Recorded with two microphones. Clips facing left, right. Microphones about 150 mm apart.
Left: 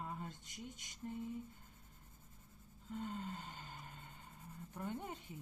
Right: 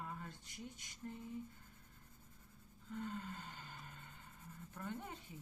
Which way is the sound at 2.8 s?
20° left (ahead or behind).